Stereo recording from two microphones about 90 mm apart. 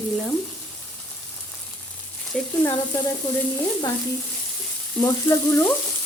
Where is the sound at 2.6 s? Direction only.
25° left (ahead or behind).